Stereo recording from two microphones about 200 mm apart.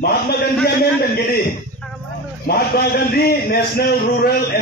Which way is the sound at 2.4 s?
50° left (ahead or behind).